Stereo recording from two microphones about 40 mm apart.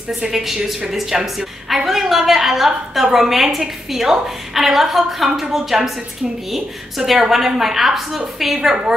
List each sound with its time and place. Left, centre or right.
0.1 s a woman's voice: centre